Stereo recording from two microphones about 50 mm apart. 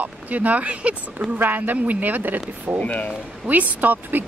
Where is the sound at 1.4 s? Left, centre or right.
Right.